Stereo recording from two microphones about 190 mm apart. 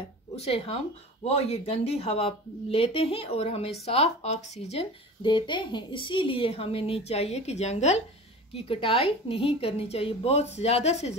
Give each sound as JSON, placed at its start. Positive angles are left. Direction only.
{"t": 0.4, "sound": "speech", "side_deg": 30}